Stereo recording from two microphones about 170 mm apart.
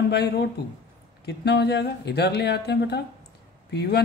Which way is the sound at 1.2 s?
80° left.